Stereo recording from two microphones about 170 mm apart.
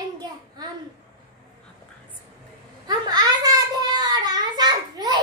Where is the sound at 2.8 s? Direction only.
25° right (ahead or behind).